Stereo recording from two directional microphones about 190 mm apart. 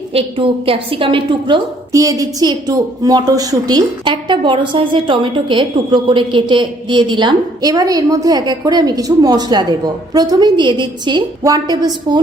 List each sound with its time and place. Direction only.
0.1 s a woman's voice: 30° right (ahead or behind)